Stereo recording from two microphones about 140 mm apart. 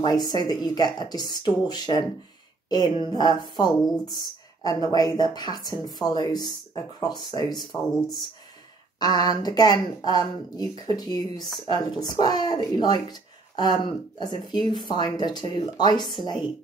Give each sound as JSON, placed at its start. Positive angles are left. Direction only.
{"t": 0.0, "sound": "speech", "side_deg": 30}
{"t": 3.8, "sound": "speech", "side_deg": 5}
{"t": 4.1, "sound": "speech", "side_deg": 30}
{"t": 9.0, "sound": "speech", "side_deg": 30}